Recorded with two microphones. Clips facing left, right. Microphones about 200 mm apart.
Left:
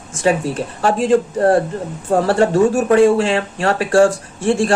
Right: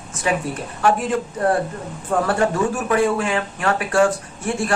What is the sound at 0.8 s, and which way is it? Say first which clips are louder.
Speech: left 5 dB; 30° left (ahead or behind).